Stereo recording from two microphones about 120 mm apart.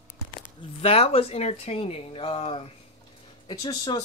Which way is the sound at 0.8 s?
55° left (ahead or behind).